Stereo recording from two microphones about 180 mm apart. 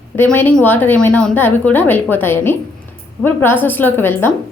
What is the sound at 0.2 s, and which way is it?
A woman's voice, 10° left (ahead or behind).